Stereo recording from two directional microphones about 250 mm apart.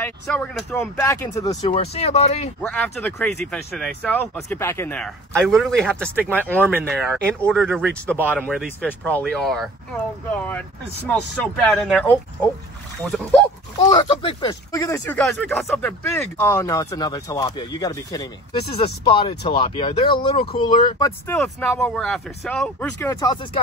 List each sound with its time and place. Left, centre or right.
0.0 s speech: centre
1.7 s speech: left
2.6 s speech: centre
13.7 s speech: centre
21.3 s speech: centre